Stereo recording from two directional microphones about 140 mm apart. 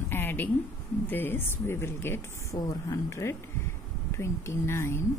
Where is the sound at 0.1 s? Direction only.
15° left (ahead or behind).